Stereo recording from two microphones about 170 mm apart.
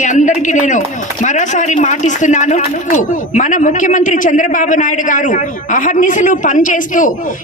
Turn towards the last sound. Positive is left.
turn(degrees=50)  # may be behind; listen again after turning